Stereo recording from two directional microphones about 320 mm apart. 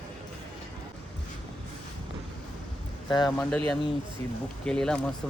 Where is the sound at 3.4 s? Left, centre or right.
Centre.